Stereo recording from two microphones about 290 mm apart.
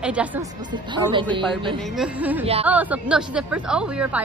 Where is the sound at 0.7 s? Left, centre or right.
Centre.